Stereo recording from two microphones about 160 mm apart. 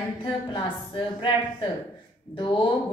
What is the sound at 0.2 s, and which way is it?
A woman's voice, 30° left (ahead or behind).